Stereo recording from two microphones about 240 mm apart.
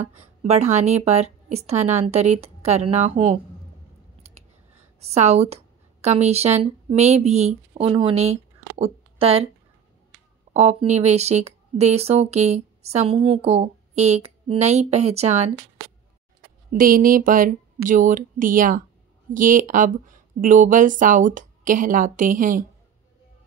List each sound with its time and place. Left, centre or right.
0.0 s speech: right
4.2 s a sound: right
5.0 s a woman's voice: right
10.5 s speech: right
16.7 s speech: right